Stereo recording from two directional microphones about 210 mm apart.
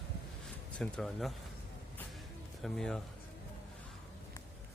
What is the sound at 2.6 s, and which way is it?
Speech, centre (ahead or behind).